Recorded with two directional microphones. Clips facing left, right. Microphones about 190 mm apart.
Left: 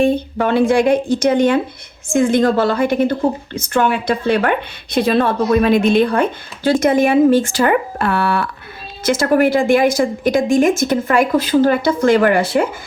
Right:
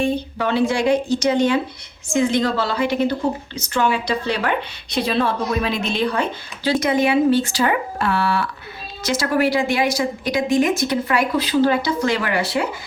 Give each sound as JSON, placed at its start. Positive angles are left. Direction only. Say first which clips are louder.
{"t": 0.0, "sound": "a woman's voice", "louder": "left 5 dB", "side_deg": 55}